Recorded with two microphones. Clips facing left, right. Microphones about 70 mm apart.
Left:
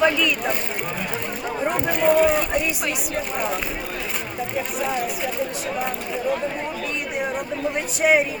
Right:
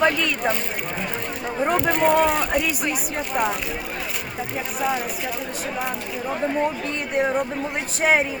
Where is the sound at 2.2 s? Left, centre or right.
Right.